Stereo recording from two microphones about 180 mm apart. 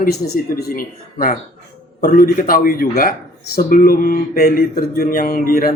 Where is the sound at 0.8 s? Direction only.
50° left (ahead or behind).